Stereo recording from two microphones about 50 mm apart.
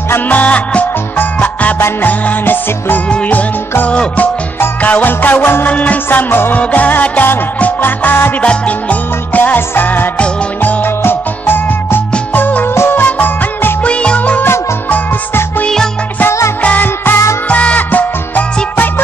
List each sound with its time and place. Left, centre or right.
0.3 s music: left
5.7 s music: left
6.0 s music: left
8.4 s music: left
13.8 s music: left
16.3 s music: left
16.6 s music: left
17.5 s music: left